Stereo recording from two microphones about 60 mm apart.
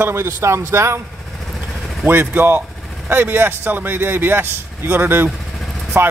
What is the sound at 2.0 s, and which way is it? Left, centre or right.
Speech, right.